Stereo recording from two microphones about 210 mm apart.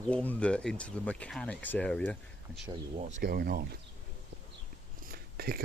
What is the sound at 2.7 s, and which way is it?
Speech, 30° right (ahead or behind).